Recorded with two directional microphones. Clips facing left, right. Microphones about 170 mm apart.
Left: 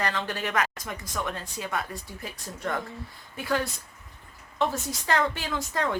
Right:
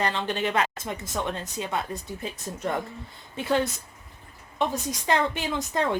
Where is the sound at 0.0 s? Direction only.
20° right (ahead or behind).